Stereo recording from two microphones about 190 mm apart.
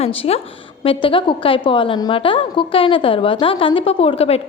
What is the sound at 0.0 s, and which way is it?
A woman's voice, 30° left (ahead or behind).